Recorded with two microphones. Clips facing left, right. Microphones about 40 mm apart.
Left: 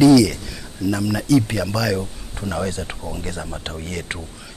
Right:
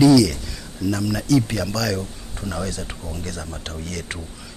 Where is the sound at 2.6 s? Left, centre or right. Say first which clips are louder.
Left 3 dB; left.